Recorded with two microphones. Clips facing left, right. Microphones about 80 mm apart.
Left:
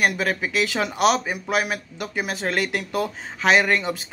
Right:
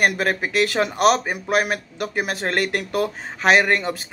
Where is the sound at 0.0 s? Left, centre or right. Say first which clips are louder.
Right 2 dB; right.